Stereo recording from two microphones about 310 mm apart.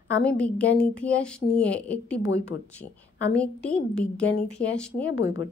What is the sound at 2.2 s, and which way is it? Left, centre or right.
Speech, left.